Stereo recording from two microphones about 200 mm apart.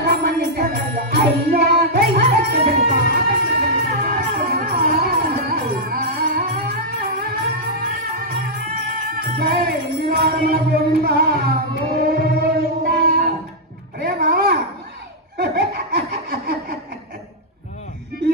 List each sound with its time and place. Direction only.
0.0 s music: 50° right (ahead or behind)
13.9 s a sound: 50° right (ahead or behind)
15.3 s snicker: 50° right (ahead or behind)